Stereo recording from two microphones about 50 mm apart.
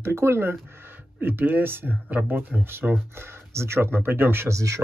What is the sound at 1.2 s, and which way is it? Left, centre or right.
Speech, right.